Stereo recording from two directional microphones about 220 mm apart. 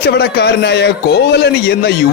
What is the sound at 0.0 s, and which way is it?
A man's voice, 50° left (ahead or behind).